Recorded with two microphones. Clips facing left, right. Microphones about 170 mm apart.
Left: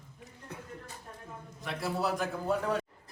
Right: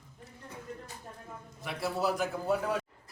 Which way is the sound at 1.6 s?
Centre (ahead or behind).